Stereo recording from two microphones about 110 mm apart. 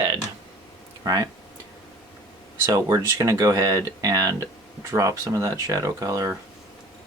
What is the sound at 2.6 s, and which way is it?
Speech, 35° right (ahead or behind).